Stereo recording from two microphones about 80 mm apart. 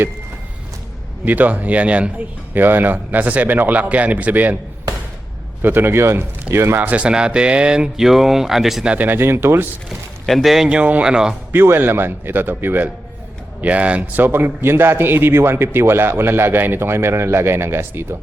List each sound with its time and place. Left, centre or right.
1.2 s a man's voice: right
5.6 s a man's voice: right
6.8 s speech: centre
9.0 s speech: right
10.2 s speech: centre
11.5 s a man's voice: right